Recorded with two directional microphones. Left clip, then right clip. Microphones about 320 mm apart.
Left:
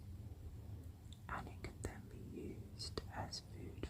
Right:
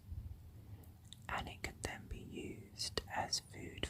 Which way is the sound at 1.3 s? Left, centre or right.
Centre.